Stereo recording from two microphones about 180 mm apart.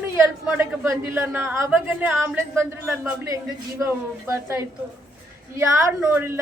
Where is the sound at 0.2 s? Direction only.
10° right (ahead or behind).